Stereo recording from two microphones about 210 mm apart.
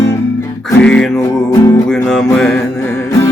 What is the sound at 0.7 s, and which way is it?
Music, 5° left (ahead or behind).